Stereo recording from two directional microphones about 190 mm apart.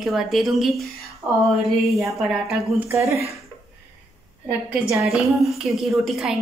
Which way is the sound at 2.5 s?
15° right (ahead or behind).